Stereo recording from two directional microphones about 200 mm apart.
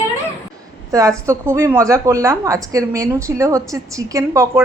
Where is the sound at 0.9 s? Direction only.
15° right (ahead or behind).